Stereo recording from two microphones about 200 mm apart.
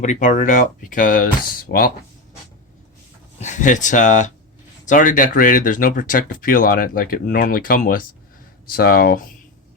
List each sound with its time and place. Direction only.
0.0 s speech: 35° left (ahead or behind)
3.4 s speech: 40° left (ahead or behind)